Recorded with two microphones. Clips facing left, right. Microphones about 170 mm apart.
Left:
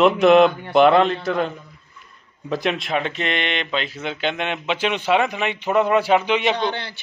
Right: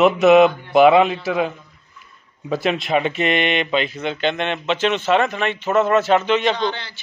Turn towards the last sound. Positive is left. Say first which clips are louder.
# even
turn(degrees=60)  # may be behind; listen again after turning